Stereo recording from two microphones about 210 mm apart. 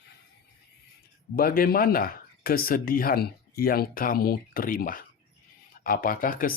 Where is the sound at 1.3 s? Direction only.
45° left (ahead or behind).